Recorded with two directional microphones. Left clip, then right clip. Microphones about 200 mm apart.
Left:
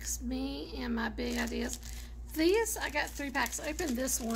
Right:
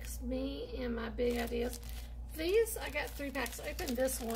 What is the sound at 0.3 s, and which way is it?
A woman's voice, 50° left (ahead or behind).